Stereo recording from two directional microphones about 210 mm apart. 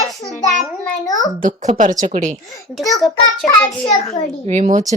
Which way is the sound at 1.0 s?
15° left (ahead or behind).